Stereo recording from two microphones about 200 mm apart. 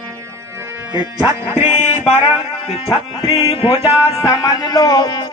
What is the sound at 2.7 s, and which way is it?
Music, 25° left (ahead or behind).